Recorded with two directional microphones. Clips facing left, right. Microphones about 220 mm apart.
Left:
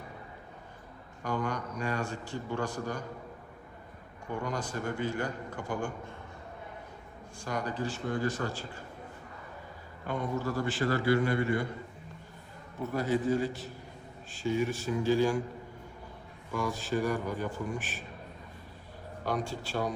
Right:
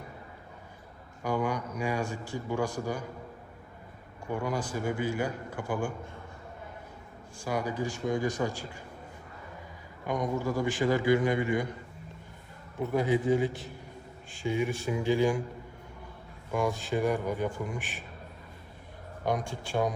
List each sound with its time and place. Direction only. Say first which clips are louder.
1.2 s speech: right 3 dB; 10° right (ahead or behind)
4.4 s speech: right 3 dB; 5° right (ahead or behind)
7.4 s speech: right 3 dB; 10° right (ahead or behind)
10.1 s speech: right 3 dB; 15° right (ahead or behind)
12.9 s speech: right 3 dB; 15° right (ahead or behind)
16.6 s speech: right 2 dB; 15° right (ahead or behind)
19.2 s speech: right 2 dB; 15° right (ahead or behind)